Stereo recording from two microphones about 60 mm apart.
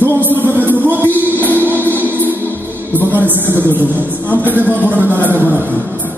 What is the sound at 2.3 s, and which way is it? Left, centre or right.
A man's voice, right.